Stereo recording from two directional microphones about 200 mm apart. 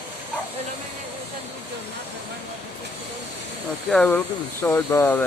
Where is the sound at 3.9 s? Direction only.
5° left (ahead or behind).